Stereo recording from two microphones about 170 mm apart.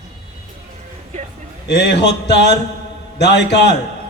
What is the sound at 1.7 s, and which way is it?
A man's voice, 80° left.